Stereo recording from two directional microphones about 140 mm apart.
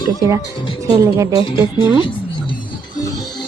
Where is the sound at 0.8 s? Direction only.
25° right (ahead or behind).